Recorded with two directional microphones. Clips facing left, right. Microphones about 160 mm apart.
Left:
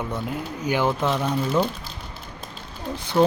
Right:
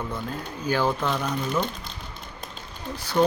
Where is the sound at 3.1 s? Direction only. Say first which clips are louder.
Left 2 dB; 10° left (ahead or behind).